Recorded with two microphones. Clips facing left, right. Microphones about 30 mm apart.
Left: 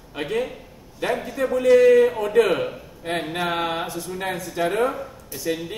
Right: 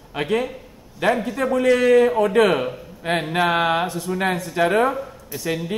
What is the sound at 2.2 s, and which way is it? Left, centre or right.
Speech, right.